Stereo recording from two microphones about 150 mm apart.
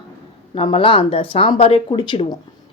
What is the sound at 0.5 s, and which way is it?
A woman's voice, 35° left (ahead or behind).